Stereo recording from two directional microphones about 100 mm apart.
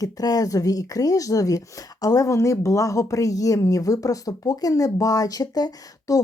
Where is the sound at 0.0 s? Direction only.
40° left (ahead or behind).